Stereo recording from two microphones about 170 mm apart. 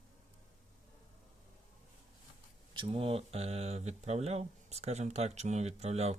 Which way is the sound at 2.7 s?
30° right (ahead or behind).